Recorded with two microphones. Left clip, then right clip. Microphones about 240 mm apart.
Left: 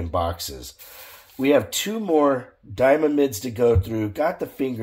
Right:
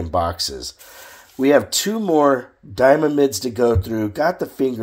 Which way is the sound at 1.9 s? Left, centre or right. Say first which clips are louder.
Right 4 dB; right.